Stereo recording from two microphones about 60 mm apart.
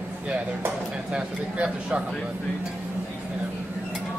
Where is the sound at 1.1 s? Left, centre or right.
Centre.